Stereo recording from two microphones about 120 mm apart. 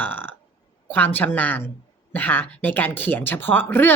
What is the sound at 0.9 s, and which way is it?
A woman's voice, 15° left (ahead or behind).